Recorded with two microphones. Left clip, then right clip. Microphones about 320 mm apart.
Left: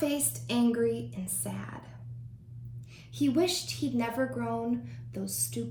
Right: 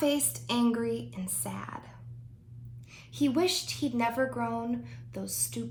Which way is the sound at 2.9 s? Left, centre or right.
Centre.